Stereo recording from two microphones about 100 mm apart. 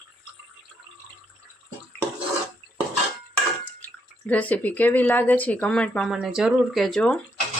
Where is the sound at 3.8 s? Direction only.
15° left (ahead or behind).